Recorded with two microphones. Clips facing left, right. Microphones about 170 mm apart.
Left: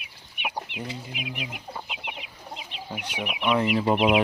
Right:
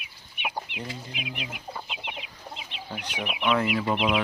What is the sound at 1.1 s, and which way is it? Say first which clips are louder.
Speech: left 2 dB; 5° left (ahead or behind).